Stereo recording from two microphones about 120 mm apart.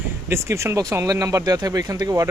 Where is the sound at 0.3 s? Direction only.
25° right (ahead or behind).